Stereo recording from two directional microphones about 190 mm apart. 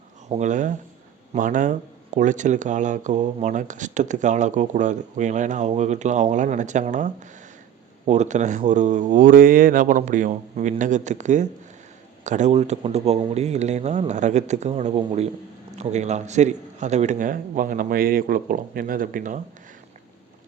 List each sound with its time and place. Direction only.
0.3 s a man's voice: 40° right (ahead or behind)